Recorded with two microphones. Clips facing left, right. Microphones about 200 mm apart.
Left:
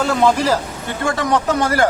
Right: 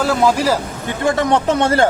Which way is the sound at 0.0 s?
5° right (ahead or behind).